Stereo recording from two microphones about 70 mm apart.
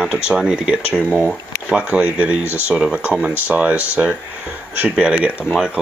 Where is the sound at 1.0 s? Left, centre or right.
Centre.